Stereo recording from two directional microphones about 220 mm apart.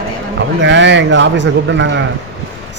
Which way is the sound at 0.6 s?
55° right (ahead or behind).